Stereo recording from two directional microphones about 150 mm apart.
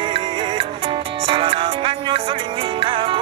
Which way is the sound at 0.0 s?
30° right (ahead or behind).